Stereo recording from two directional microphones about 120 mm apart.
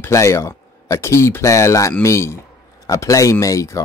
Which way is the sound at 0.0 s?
25° left (ahead or behind).